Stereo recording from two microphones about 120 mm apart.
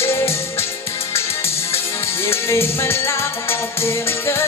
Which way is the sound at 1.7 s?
20° left (ahead or behind).